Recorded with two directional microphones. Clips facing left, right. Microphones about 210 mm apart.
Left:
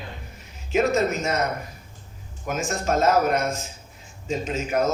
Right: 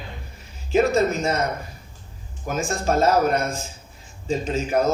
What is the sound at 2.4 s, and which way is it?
A man's voice, 30° right (ahead or behind).